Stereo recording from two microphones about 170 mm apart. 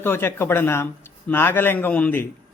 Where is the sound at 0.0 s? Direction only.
15° left (ahead or behind).